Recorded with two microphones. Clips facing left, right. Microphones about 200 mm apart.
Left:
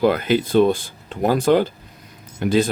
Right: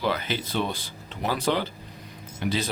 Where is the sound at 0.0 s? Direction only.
50° left (ahead or behind).